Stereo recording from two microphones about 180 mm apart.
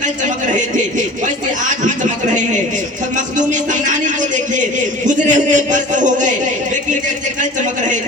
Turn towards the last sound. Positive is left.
turn(degrees=-45)  # may be behind; listen again after turning